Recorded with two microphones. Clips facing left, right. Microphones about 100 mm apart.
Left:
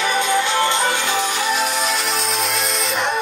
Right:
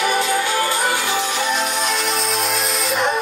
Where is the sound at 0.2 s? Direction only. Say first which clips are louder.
Left 1 dB; 25° left (ahead or behind).